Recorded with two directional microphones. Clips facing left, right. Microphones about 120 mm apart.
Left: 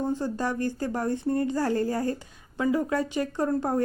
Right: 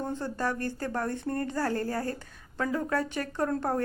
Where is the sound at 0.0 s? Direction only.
10° left (ahead or behind).